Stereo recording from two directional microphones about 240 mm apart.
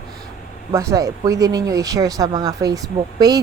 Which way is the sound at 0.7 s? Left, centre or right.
Centre.